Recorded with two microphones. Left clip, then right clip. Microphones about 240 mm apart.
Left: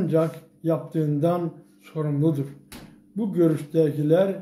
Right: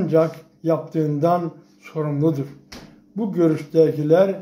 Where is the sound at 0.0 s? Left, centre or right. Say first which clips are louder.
Right 5 dB; centre.